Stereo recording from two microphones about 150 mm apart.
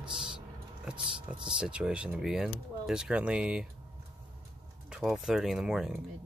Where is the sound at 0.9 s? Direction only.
30° right (ahead or behind).